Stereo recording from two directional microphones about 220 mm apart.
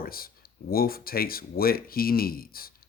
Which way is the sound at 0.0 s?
40° left (ahead or behind).